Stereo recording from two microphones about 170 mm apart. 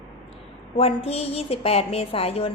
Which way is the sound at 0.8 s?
35° left (ahead or behind).